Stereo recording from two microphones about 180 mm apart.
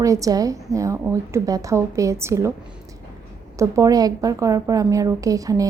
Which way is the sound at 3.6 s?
20° right (ahead or behind).